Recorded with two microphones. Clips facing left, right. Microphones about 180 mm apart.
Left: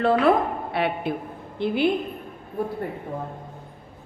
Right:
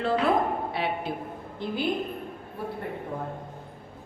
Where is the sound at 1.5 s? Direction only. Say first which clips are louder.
Left 8 dB; 70° left (ahead or behind).